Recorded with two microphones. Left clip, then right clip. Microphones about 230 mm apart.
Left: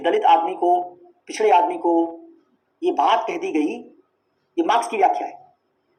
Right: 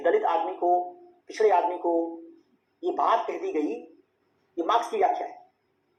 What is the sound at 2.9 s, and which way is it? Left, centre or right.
Speech, left.